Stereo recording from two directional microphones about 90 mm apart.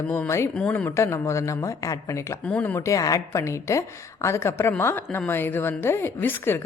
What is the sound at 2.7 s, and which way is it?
A woman's voice, 35° left (ahead or behind).